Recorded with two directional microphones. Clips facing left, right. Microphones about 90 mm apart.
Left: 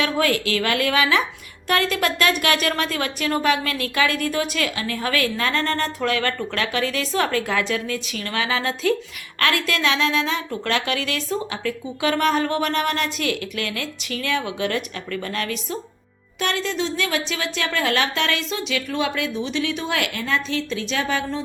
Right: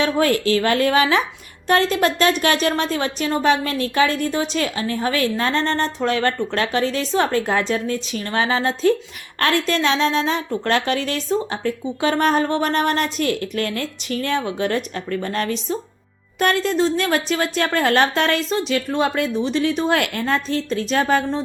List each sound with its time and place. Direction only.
0.0 s speech: 35° right (ahead or behind)
16.4 s a woman's voice: 45° right (ahead or behind)